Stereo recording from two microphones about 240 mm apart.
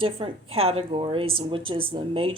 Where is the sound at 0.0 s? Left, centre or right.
Right.